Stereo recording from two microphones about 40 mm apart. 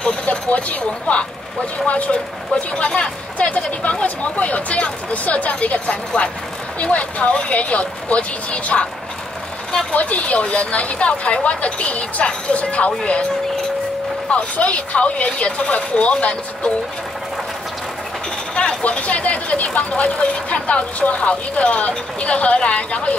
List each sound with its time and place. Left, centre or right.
0.0 s speech: left
9.9 s speech: left
14.3 s speech: left
18.5 s speech: left